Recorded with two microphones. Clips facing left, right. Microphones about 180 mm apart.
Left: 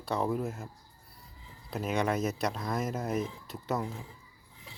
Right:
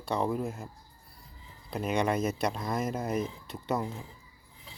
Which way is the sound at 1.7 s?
Centre (ahead or behind).